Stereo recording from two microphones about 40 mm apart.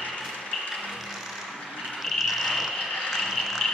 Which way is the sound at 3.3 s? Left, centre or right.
Centre.